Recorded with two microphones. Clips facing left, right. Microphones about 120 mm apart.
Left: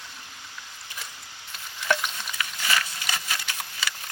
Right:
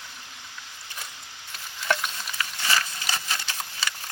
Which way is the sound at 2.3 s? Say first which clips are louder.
Right 1 dB; 35° right (ahead or behind).